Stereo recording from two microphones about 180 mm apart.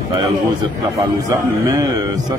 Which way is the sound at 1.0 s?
20° right (ahead or behind).